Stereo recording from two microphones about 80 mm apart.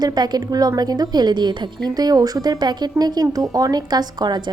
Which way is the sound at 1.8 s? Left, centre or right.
Right.